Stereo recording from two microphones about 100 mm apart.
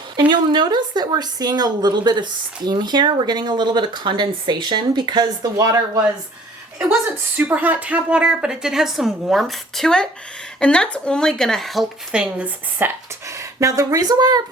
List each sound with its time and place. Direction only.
0.2 s speech: 50° right (ahead or behind)
7.3 s a woman's voice: 15° right (ahead or behind)
12.8 s speech: 25° right (ahead or behind); by 14.4 s 40° right (ahead or behind)